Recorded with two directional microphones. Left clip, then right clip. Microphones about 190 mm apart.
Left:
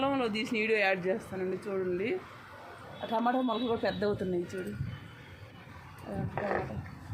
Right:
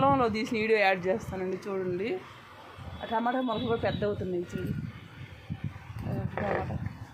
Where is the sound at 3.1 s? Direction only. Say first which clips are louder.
Right 1 dB; 5° left (ahead or behind).